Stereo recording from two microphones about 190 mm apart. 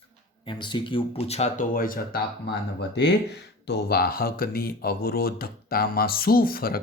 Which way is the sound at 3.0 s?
65° left (ahead or behind).